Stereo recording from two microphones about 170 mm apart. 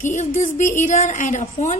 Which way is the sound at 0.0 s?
45° left (ahead or behind).